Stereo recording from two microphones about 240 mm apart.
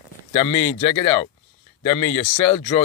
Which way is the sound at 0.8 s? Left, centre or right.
Left.